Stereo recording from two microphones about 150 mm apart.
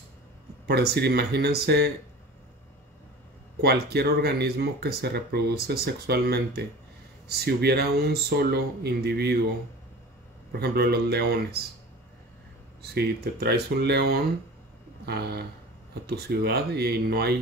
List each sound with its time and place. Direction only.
0.7 s speech: 90° right
3.6 s speech: 90° right
10.6 s speech: 90° right
12.8 s speech: 90° right